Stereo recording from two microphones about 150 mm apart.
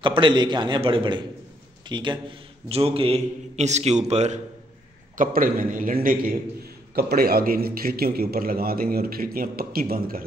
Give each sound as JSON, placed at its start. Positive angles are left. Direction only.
{"t": 0.0, "sound": "a man's voice", "side_deg": -35}
{"t": 5.1, "sound": "a man's voice", "side_deg": -65}
{"t": 7.0, "sound": "a man's voice", "side_deg": -85}